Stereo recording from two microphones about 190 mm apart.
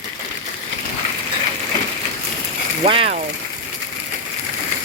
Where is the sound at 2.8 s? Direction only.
30° right (ahead or behind).